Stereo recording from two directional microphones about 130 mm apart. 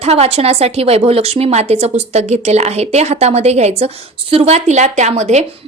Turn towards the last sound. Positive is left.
turn(degrees=-60)  # may be behind; listen again after turning